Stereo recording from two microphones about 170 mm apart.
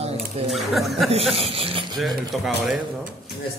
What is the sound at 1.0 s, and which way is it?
Speech, 35° right (ahead or behind).